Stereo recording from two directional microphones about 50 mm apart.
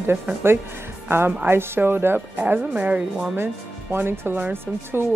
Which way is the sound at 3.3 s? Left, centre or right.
Right.